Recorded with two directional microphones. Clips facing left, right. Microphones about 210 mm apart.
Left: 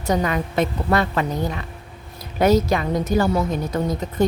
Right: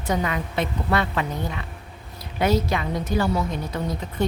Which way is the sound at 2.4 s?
40° left (ahead or behind).